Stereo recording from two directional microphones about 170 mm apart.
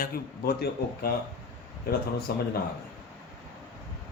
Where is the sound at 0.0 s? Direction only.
60° left (ahead or behind).